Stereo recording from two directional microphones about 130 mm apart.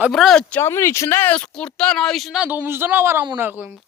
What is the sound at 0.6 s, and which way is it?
Speech, 20° left (ahead or behind).